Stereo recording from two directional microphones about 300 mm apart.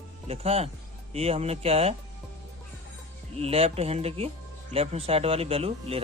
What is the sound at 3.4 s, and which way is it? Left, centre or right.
Speech, centre.